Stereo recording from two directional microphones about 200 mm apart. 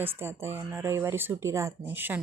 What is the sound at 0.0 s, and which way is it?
Speech, 10° right (ahead or behind).